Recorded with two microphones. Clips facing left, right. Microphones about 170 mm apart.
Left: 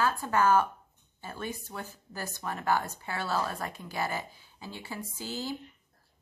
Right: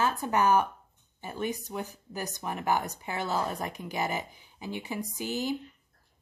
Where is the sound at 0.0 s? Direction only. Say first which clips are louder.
Even; 20° right (ahead or behind).